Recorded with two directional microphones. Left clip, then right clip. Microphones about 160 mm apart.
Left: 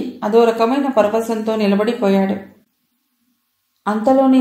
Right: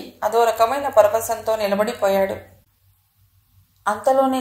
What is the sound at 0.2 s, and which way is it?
Speech, 30° right (ahead or behind).